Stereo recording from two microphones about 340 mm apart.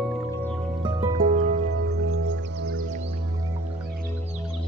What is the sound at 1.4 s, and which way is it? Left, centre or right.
Music, right.